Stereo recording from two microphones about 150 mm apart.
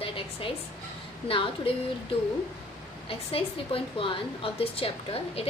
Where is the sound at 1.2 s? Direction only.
35° left (ahead or behind).